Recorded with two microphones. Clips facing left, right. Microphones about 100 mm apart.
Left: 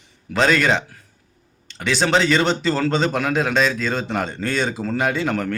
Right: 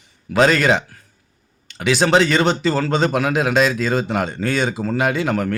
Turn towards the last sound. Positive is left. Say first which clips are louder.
# right 2 dB
turn(degrees=-5)  # may be behind; listen again after turning